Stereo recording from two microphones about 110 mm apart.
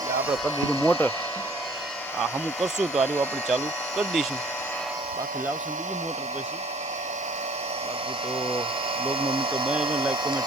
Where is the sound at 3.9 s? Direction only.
Centre (ahead or behind).